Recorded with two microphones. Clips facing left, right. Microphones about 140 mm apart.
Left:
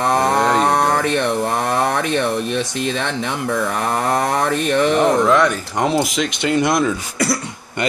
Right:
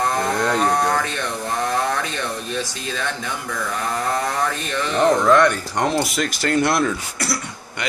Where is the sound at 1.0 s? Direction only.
70° left (ahead or behind).